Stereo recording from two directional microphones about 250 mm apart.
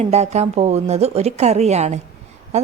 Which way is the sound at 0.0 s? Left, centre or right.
Right.